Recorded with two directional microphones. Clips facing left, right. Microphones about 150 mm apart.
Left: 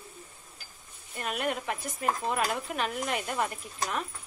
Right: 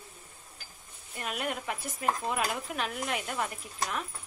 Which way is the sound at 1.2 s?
5° right (ahead or behind).